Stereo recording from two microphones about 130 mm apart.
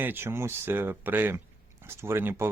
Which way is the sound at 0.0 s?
15° right (ahead or behind).